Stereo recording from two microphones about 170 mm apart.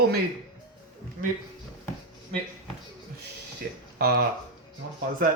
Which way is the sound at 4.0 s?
70° right (ahead or behind).